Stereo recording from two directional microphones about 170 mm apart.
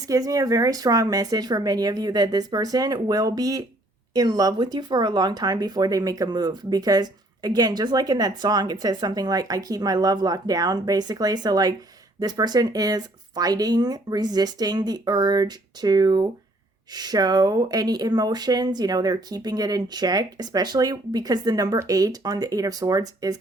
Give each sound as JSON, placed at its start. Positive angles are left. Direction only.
{"t": 0.1, "sound": "speech", "side_deg": -20}